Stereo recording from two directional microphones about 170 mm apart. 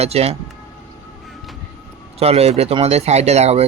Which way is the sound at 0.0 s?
40° right (ahead or behind).